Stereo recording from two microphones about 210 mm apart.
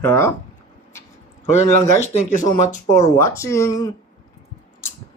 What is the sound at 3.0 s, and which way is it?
Speech, 15° left (ahead or behind).